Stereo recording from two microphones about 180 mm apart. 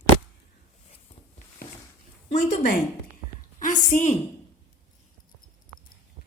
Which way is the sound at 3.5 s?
45° left (ahead or behind).